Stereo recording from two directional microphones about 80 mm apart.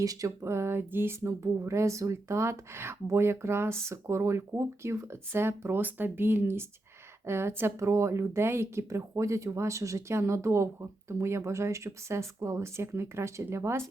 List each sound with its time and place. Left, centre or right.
0.0 s a woman's voice: right
1.3 s a woman's voice: right